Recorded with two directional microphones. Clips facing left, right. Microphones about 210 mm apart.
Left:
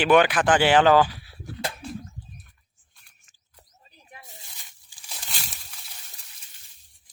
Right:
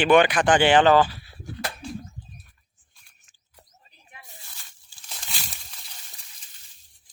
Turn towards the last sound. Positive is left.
turn(degrees=0)  # may be behind; listen again after turning